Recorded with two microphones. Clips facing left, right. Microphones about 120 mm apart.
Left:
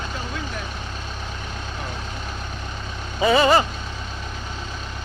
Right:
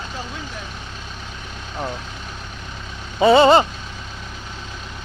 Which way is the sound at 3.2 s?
25° right (ahead or behind).